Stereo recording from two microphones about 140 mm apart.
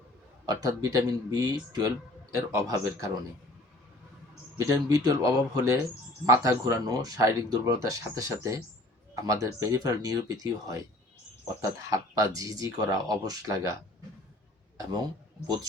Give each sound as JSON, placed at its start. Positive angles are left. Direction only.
{"t": 0.4, "sound": "speech", "side_deg": -25}
{"t": 4.5, "sound": "speech", "side_deg": -25}
{"t": 11.9, "sound": "speech", "side_deg": -25}